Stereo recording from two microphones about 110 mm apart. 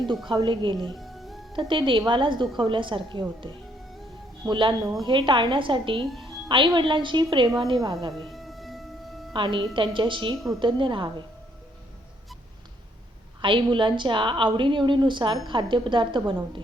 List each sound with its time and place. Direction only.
0.3 s a woman's voice: 45° right (ahead or behind)
0.9 s music: centre (ahead or behind)
1.5 s a woman's voice: 45° right (ahead or behind)
6.0 s a woman's voice: centre (ahead or behind)
6.5 s a woman's voice: 50° right (ahead or behind)
8.1 s music: centre (ahead or behind)
9.3 s a woman's voice: 45° right (ahead or behind)
13.4 s a woman's voice: 50° right (ahead or behind)